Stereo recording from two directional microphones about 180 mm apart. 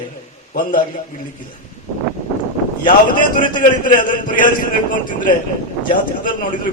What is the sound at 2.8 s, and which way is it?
A man's voice, 50° left (ahead or behind).